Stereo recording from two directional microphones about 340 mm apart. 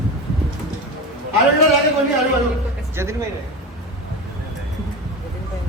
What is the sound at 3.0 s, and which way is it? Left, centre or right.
Speech, centre.